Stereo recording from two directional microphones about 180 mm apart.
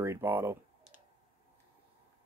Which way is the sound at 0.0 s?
10° right (ahead or behind).